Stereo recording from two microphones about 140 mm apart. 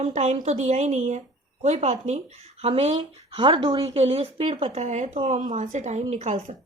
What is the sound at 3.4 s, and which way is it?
Speech, 35° right (ahead or behind).